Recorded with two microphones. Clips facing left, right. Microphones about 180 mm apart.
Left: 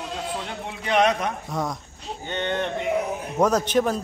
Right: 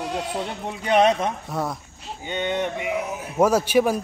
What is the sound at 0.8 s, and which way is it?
Speech, 30° right (ahead or behind).